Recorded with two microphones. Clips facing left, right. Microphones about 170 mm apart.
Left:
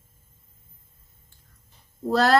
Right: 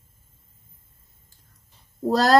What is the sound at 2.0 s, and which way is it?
Speech, 40° right (ahead or behind).